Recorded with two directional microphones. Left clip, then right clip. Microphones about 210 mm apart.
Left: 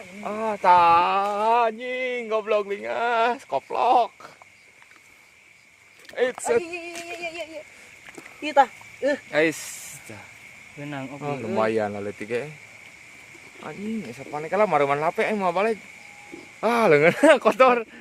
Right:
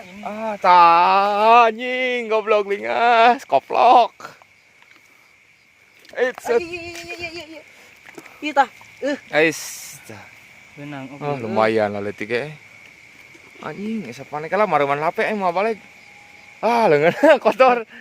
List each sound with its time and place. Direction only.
0.2 s speech: 10° left (ahead or behind)
0.8 s speech: 35° right (ahead or behind)
6.4 s speech: 20° right (ahead or behind)
6.7 s female singing: 45° right (ahead or behind)
7.2 s horse: 15° right (ahead or behind)
8.1 s speech: 15° right (ahead or behind)
10.8 s speech: centre (ahead or behind)
11.2 s speech: 30° right (ahead or behind)
13.7 s speech: 25° right (ahead or behind); by 17.8 s 5° right (ahead or behind)